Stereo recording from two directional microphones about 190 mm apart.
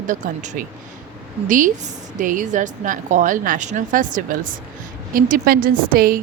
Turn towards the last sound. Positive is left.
turn(degrees=-50)  # may be behind; listen again after turning